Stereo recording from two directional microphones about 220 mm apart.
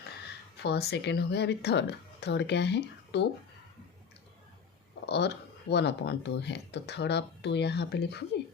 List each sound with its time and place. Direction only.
0.5 s speech: 50° left (ahead or behind)
5.0 s speech: 50° left (ahead or behind)